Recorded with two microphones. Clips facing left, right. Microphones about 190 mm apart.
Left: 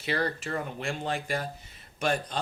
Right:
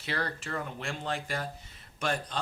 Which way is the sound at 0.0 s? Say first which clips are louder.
Left 5 dB; 20° left (ahead or behind).